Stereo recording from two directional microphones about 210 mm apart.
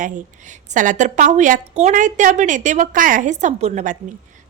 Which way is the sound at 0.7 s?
35° right (ahead or behind).